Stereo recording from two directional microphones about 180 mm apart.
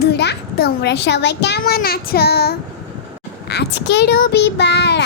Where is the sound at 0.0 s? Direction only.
65° left (ahead or behind).